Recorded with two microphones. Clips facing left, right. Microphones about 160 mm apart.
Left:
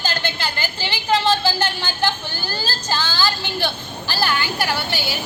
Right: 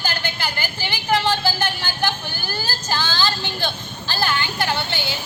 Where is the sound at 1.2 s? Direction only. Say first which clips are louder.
Left 2 dB; 15° right (ahead or behind).